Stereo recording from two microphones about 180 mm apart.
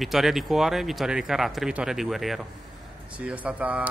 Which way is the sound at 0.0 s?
Centre (ahead or behind).